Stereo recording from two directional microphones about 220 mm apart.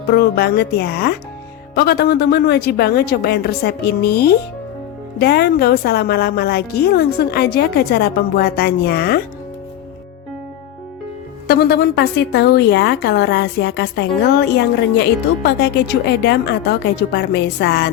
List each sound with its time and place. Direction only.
0.1 s a woman's voice: 45° left (ahead or behind)
11.4 s a woman's voice: 45° left (ahead or behind)